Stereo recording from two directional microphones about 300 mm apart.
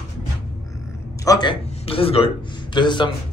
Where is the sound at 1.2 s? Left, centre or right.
Centre.